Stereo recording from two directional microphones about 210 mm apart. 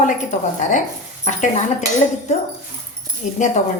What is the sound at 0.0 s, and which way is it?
Speech, 35° left (ahead or behind).